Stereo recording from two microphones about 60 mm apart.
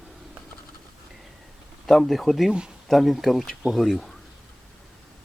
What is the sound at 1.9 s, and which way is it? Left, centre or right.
Speech, centre.